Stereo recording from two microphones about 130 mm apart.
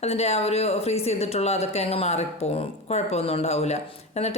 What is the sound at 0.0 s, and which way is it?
Speech, 55° left (ahead or behind).